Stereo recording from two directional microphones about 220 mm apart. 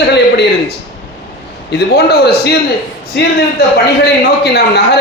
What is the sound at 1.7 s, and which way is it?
A man's voice, 45° left (ahead or behind).